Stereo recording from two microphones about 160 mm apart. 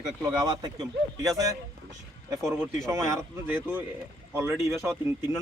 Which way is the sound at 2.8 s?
20° right (ahead or behind).